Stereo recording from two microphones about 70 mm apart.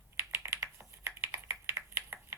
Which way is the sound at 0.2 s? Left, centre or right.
Right.